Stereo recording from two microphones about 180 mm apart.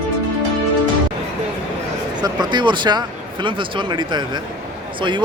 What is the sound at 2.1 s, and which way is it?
Speech, 25° right (ahead or behind).